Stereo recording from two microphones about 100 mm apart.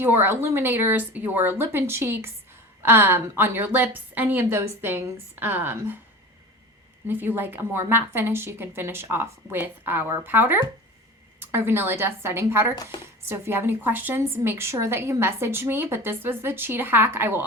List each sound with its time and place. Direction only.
0.0 s a woman's voice: 20° right (ahead or behind)
7.1 s a woman's voice: 20° right (ahead or behind)
12.7 s speech: 40° left (ahead or behind)
13.2 s a woman's voice: 25° right (ahead or behind)